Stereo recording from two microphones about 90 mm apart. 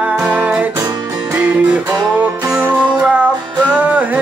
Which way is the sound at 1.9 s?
45° right (ahead or behind).